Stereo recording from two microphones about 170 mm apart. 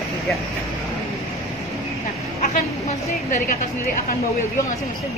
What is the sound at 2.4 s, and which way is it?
A woman's voice, 45° left (ahead or behind).